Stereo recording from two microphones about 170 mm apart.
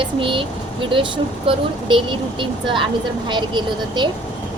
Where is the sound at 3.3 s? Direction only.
25° right (ahead or behind).